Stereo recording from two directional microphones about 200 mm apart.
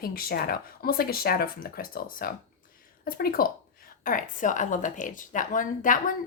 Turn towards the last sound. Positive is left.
turn(degrees=40)  # may be behind; listen again after turning